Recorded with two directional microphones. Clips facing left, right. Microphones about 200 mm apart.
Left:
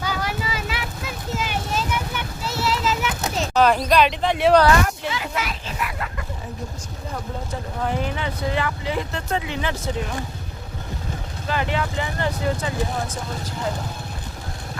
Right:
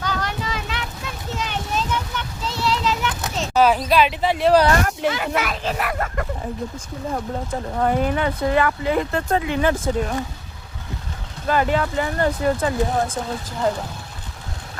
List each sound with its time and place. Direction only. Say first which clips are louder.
0.0 s vehicle: even; 10° left (ahead or behind)
3.3 s speech: right 1 dB; 5° right (ahead or behind)
4.7 s speech: right 1 dB; 55° right (ahead or behind)
7.8 s speech: right 6 dB; 50° right (ahead or behind)
11.4 s speech: right 5 dB; 45° right (ahead or behind)